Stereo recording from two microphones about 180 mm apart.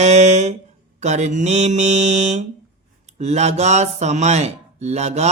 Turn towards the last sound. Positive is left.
turn(degrees=-40)  # may be behind; listen again after turning